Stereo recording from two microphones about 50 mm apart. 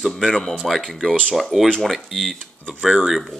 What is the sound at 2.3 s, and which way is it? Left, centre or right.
Speech, left.